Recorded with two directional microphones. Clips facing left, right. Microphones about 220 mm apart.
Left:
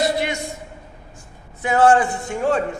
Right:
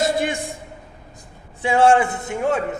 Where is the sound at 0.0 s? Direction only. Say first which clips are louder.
Even; 50° right (ahead or behind).